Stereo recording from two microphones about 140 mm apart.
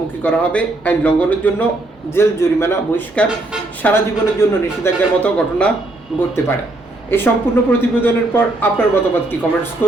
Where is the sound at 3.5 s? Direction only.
5° right (ahead or behind).